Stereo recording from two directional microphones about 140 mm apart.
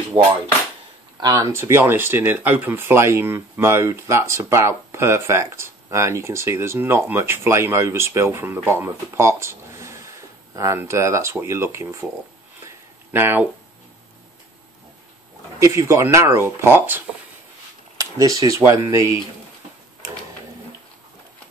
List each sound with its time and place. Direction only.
0.2 s speech: 35° right (ahead or behind)
1.2 s speech: 25° right (ahead or behind)
12.6 s a sound: 15° right (ahead or behind)
15.6 s speech: 20° right (ahead or behind)